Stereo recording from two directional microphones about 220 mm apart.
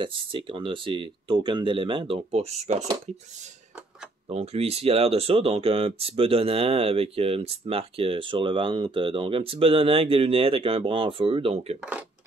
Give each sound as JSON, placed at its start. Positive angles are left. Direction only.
{"t": 0.0, "sound": "speech", "side_deg": -25}
{"t": 4.3, "sound": "speech", "side_deg": -30}